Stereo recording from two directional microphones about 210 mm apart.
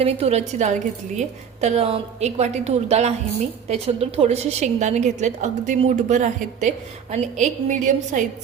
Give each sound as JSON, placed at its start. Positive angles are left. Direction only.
{"t": 0.0, "sound": "a woman's voice", "side_deg": -30}